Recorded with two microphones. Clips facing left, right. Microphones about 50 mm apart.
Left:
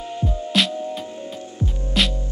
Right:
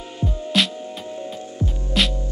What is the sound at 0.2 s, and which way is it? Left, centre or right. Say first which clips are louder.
Music: even; centre.